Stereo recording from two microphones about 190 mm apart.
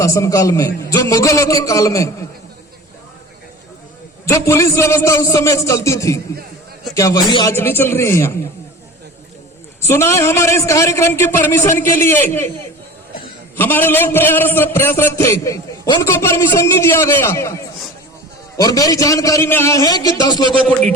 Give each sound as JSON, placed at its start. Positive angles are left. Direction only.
{"t": 0.0, "sound": "a man's voice", "side_deg": 15}
{"t": 4.3, "sound": "a man's voice", "side_deg": 15}
{"t": 9.8, "sound": "a man's voice", "side_deg": 15}
{"t": 13.6, "sound": "a man's voice", "side_deg": 10}
{"t": 20.5, "sound": "speech", "side_deg": 5}